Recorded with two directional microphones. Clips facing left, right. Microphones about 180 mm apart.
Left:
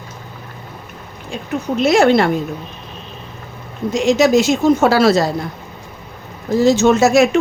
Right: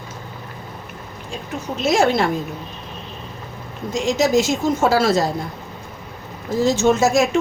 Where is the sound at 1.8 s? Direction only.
65° left (ahead or behind).